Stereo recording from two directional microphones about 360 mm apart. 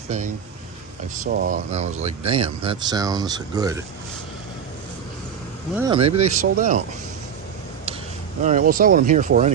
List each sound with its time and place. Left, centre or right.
1.2 s speech: right
5.7 s speech: centre
8.4 s speech: right